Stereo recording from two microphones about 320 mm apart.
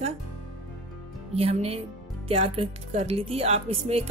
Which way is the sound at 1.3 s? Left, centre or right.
Centre.